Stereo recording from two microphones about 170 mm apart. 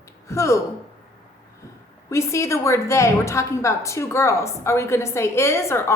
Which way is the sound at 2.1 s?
15° left (ahead or behind).